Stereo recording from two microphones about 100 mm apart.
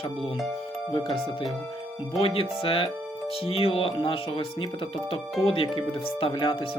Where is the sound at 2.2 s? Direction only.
65° left (ahead or behind).